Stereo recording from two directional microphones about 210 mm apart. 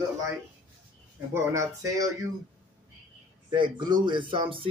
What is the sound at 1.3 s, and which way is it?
Speech, 15° right (ahead or behind).